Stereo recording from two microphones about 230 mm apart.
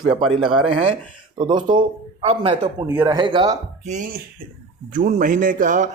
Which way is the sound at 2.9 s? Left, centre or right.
Centre.